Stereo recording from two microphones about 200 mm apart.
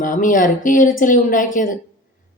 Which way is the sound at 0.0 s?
40° left (ahead or behind).